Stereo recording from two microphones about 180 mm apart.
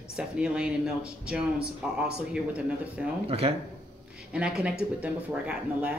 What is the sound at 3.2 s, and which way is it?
Speech, 35° right (ahead or behind).